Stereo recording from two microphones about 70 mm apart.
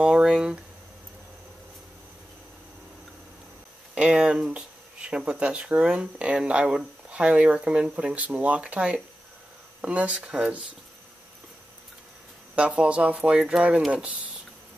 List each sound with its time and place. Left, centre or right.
0.0 s speech: centre
3.9 s speech: centre
12.5 s speech: centre